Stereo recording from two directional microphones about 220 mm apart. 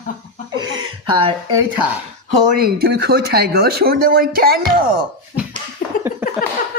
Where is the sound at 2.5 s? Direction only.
45° right (ahead or behind).